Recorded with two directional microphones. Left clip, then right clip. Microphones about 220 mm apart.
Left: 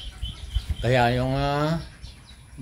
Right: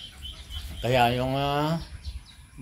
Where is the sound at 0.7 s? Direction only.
5° right (ahead or behind).